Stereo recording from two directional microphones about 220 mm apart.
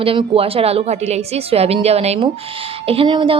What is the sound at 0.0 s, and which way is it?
A woman's voice, 25° right (ahead or behind).